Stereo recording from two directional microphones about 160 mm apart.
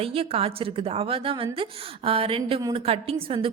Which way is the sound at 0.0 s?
35° right (ahead or behind).